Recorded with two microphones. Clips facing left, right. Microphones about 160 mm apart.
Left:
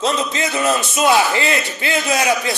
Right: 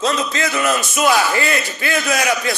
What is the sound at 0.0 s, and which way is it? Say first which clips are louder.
A man's voice: even; 25° left (ahead or behind).